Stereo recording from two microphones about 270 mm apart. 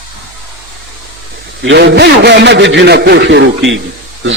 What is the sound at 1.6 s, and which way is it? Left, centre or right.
A man's voice, right.